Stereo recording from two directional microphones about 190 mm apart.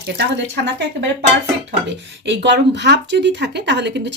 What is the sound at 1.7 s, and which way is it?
Speech, 70° right (ahead or behind).